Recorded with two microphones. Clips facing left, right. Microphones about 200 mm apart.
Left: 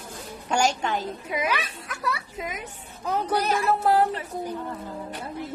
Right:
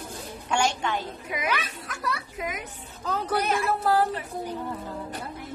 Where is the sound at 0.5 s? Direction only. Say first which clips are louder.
Left 2 dB; 40° left (ahead or behind).